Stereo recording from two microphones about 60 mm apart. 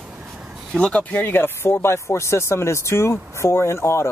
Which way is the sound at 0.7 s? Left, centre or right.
Centre.